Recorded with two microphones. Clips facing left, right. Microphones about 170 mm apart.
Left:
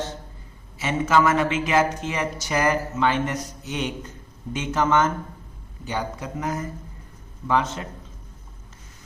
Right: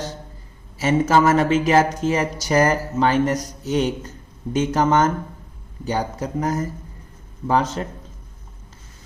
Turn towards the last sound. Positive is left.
turn(degrees=-35)  # may be behind; listen again after turning